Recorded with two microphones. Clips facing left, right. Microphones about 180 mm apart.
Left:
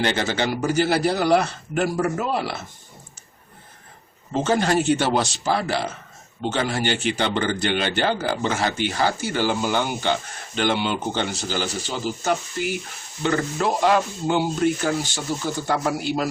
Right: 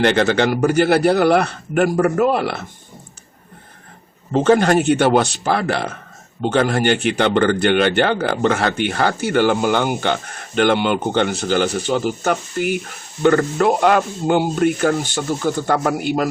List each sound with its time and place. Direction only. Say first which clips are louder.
0.0 s speech: right 7 dB; 65° right (ahead or behind)
4.3 s speech: right 7 dB; 65° right (ahead or behind)